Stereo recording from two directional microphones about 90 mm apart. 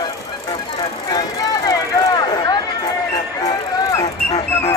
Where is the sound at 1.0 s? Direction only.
45° left (ahead or behind).